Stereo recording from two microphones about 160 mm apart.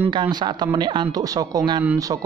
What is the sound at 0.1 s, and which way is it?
Speech, 30° right (ahead or behind).